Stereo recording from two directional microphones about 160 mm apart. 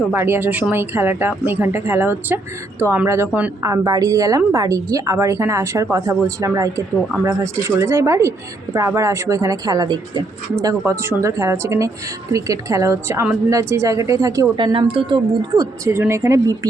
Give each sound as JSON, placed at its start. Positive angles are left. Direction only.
{"t": 0.1, "sound": "a woman's voice", "side_deg": -15}
{"t": 14.5, "sound": "a woman's voice", "side_deg": -30}